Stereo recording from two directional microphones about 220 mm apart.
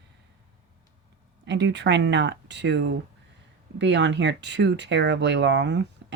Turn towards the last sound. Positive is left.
turn(degrees=-55)  # may be behind; listen again after turning